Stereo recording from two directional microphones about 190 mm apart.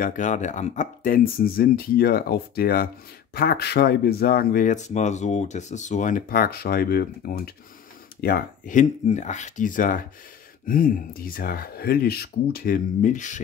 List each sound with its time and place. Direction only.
0.0 s speech: 40° left (ahead or behind)